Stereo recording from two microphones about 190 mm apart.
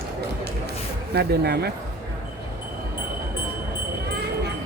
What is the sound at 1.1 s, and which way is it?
Speech, 60° right (ahead or behind).